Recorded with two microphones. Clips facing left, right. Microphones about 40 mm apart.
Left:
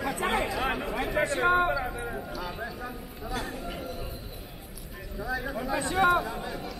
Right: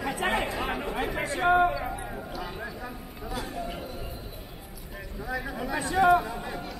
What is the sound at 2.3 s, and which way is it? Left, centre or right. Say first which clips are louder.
Clip-clop: left 1 dB; right.